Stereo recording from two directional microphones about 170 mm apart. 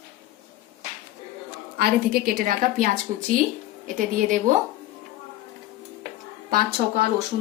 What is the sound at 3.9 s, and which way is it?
Speech, 50° right (ahead or behind).